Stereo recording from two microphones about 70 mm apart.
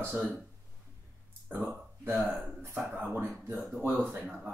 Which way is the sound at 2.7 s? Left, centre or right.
Centre.